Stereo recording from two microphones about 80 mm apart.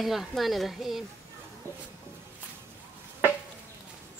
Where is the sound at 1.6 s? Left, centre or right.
Right.